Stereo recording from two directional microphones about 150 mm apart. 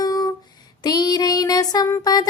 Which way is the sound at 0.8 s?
25° left (ahead or behind).